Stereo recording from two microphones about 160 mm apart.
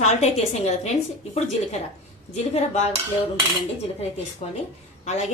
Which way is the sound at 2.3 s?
45° left (ahead or behind).